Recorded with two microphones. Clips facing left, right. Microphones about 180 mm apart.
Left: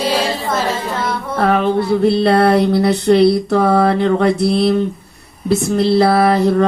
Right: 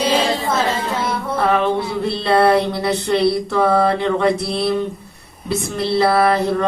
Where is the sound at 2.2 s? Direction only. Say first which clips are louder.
Left 2 dB; 50° left (ahead or behind).